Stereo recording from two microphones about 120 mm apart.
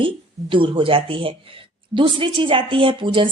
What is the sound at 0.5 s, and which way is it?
Speech, 45° right (ahead or behind).